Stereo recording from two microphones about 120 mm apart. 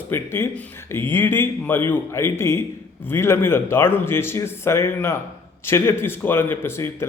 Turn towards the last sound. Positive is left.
turn(degrees=20)  # may be behind; listen again after turning